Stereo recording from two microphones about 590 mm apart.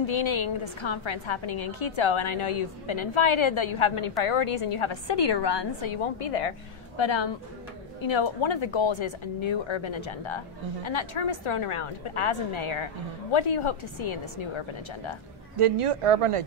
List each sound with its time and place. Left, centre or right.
0.0 s speech: left
7.0 s speech: left
15.5 s speech: right